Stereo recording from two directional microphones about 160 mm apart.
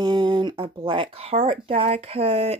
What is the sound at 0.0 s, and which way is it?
Speech, 25° right (ahead or behind).